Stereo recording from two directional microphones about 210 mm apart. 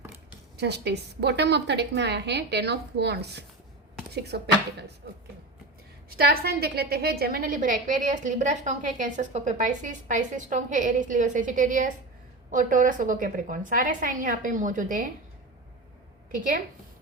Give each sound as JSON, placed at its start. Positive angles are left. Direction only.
{"t": 0.5, "sound": "a woman's voice", "side_deg": -50}
{"t": 6.1, "sound": "a woman's voice", "side_deg": -45}
{"t": 16.3, "sound": "a woman's voice", "side_deg": -40}